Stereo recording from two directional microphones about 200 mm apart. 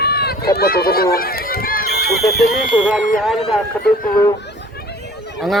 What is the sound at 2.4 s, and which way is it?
Speech, 50° left (ahead or behind).